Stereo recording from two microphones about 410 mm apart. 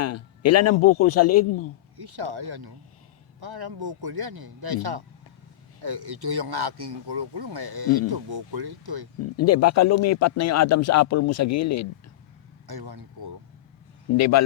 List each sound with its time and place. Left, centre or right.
0.0 s speech: left
2.0 s speech: right
9.2 s speech: left
12.6 s speech: right
14.2 s speech: left